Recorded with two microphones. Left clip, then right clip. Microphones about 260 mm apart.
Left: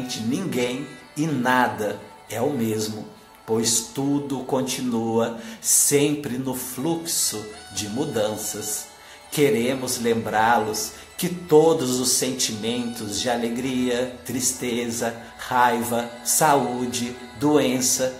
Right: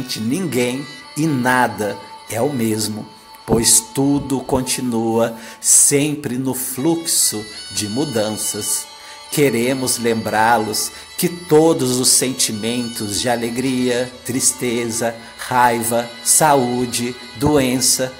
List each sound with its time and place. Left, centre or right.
0.1 s speech: right
3.5 s speech: right